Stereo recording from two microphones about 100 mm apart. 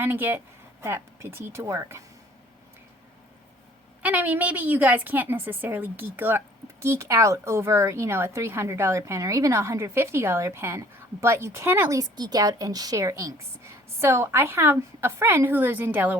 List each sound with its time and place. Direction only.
0.0 s a woman's voice: 20° right (ahead or behind)
4.0 s a woman's voice: 15° right (ahead or behind)
11.9 s a woman's voice: 40° right (ahead or behind); by 16.1 s 20° right (ahead or behind)